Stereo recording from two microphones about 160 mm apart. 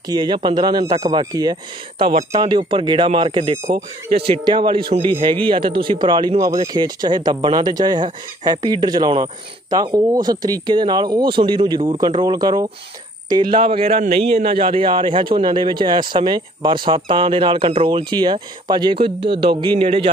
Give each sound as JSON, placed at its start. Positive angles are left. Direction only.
{"t": 0.2, "sound": "speech", "side_deg": -30}